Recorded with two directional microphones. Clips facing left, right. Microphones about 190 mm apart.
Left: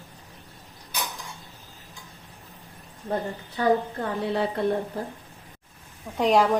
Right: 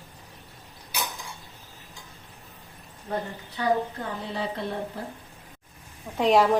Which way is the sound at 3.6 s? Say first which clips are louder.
Left 3 dB; 45° left (ahead or behind).